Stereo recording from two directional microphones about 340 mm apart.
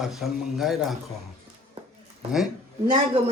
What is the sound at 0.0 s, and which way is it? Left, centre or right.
Speech, centre.